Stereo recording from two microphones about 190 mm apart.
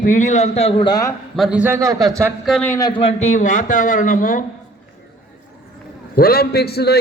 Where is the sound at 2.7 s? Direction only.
20° left (ahead or behind); by 4.4 s 45° left (ahead or behind).